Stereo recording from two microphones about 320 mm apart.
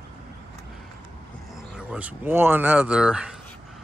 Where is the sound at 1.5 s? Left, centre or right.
Centre.